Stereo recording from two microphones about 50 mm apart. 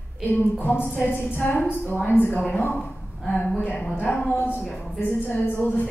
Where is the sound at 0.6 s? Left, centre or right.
Left.